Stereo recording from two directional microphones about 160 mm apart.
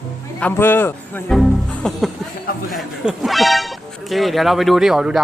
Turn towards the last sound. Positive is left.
turn(degrees=-5)  # may be behind; listen again after turning